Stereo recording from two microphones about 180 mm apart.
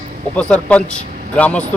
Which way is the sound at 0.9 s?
45° right (ahead or behind).